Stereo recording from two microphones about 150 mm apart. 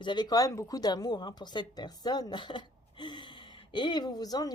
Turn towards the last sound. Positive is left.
turn(degrees=25)  # may be behind; listen again after turning